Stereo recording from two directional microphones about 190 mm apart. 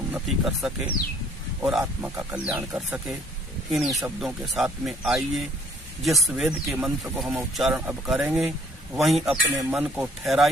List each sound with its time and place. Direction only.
0.1 s speech: centre (ahead or behind)